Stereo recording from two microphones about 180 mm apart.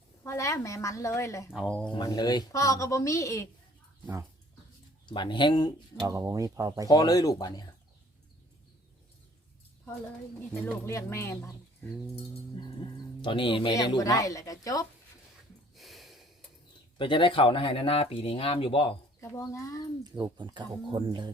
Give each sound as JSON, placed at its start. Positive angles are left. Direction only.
{"t": 0.2, "sound": "a woman's voice", "side_deg": 15}
{"t": 1.5, "sound": "speech", "side_deg": 5}
{"t": 1.9, "sound": "a woman's voice", "side_deg": 20}
{"t": 4.0, "sound": "speech", "side_deg": -15}
{"t": 5.0, "sound": "speech", "side_deg": 25}
{"t": 6.0, "sound": "speech", "side_deg": -20}
{"t": 6.8, "sound": "speech", "side_deg": 20}
{"t": 10.5, "sound": "a woman's voice", "side_deg": 15}
{"t": 13.2, "sound": "speech", "side_deg": 30}
{"t": 15.7, "sound": "a sound", "side_deg": 0}
{"t": 17.0, "sound": "speech", "side_deg": 30}
{"t": 19.2, "sound": "a woman's voice", "side_deg": 15}
{"t": 20.1, "sound": "speech", "side_deg": -25}